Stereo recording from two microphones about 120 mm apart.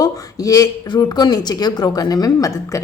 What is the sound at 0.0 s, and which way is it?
A woman's voice, 30° left (ahead or behind).